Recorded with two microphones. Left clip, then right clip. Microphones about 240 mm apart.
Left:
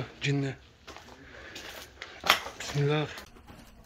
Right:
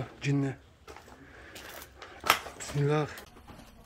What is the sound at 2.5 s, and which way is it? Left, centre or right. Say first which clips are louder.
Speech: even; centre.